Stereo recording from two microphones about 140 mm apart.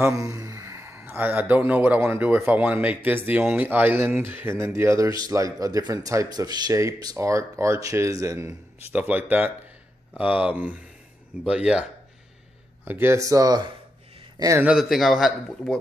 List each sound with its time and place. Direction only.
0.0 s speech: 25° right (ahead or behind)
8.9 s speech: 10° right (ahead or behind); by 13.7 s 25° right (ahead or behind)
14.6 s speech: 5° right (ahead or behind)